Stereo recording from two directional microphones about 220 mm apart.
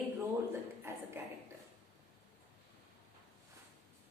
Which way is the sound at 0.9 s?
10° right (ahead or behind).